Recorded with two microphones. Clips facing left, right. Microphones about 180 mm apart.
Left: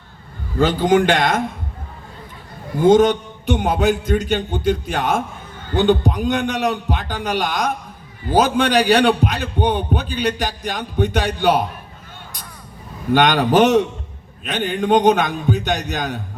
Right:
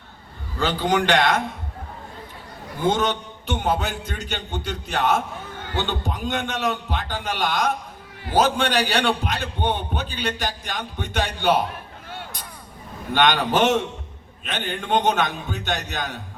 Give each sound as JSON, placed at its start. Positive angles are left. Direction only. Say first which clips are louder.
{"t": 0.6, "sound": "a man's voice", "louder": "left 7 dB", "side_deg": 45}
{"t": 2.8, "sound": "a man's voice", "louder": "left 9 dB", "side_deg": 50}
{"t": 13.1, "sound": "a man's voice", "louder": "left 5 dB", "side_deg": 45}